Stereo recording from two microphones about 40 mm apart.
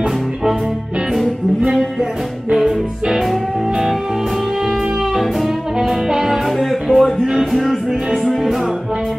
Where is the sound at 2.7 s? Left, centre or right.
Centre.